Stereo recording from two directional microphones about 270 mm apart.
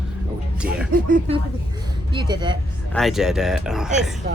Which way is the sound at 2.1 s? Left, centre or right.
Centre.